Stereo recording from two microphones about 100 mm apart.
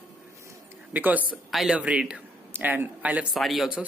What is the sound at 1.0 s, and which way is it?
Speech, 15° right (ahead or behind).